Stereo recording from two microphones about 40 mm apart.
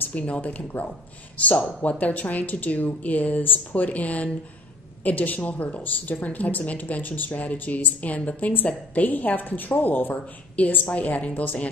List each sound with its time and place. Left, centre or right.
0.1 s a woman's voice: left
10.9 s a woman's voice: left